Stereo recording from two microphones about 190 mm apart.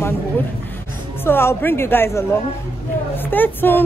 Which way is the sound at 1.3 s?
10° left (ahead or behind).